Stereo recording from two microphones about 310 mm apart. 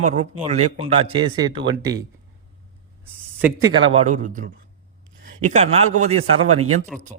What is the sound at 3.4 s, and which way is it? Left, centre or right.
A man's voice, centre.